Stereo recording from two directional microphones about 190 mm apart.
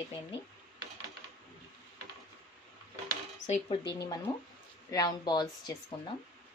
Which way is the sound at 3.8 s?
65° left (ahead or behind).